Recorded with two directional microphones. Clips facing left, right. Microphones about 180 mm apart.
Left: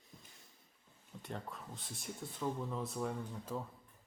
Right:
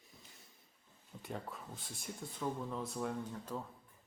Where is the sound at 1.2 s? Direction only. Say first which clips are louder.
Right 1 dB; centre (ahead or behind).